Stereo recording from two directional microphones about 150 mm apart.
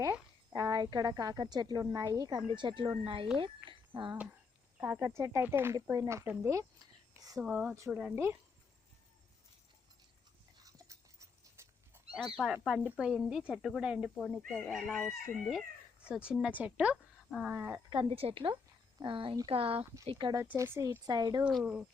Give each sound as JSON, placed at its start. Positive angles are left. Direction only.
{"t": 0.0, "sound": "a woman's voice", "side_deg": -20}
{"t": 2.5, "sound": "speech", "side_deg": -35}
{"t": 4.8, "sound": "speech", "side_deg": -10}
{"t": 7.3, "sound": "speech", "side_deg": -5}
{"t": 10.6, "sound": "dog", "side_deg": -25}
{"t": 12.6, "sound": "speech", "side_deg": -5}
{"t": 17.5, "sound": "speech", "side_deg": -15}
{"t": 17.9, "sound": "speech", "side_deg": -40}
{"t": 19.8, "sound": "a woman's voice", "side_deg": -20}
{"t": 20.4, "sound": "a woman's voice", "side_deg": -15}
{"t": 21.5, "sound": "speech", "side_deg": -5}